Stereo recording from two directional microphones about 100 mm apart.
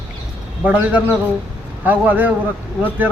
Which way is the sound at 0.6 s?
15° right (ahead or behind).